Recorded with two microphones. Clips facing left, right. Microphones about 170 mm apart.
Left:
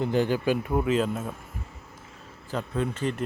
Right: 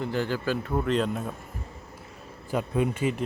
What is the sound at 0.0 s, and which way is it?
A man's voice, 20° left (ahead or behind).